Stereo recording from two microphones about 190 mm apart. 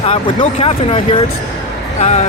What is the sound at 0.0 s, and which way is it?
Speech, 30° left (ahead or behind).